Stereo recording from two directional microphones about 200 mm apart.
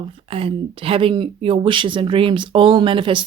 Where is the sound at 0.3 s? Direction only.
30° right (ahead or behind).